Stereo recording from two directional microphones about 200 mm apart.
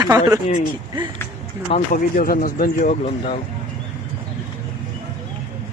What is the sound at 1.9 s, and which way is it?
Speech, 45° left (ahead or behind).